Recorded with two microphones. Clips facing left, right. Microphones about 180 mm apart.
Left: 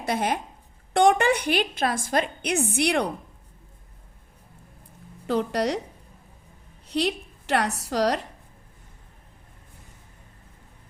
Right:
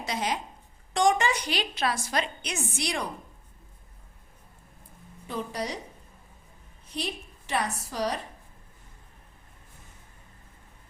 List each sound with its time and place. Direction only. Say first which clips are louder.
0.0 s a woman's voice: left 5 dB; 55° left (ahead or behind)
5.2 s a woman's voice: left 9 dB; 70° left (ahead or behind)
6.8 s a woman's voice: left 9 dB; 70° left (ahead or behind)